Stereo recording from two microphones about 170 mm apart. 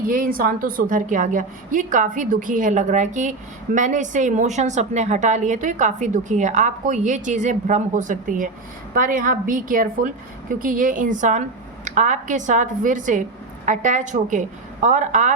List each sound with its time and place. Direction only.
0.0 s a woman's voice: 55° right (ahead or behind)